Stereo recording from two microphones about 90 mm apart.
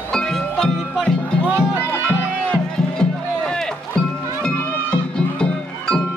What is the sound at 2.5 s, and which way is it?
Music, 10° left (ahead or behind).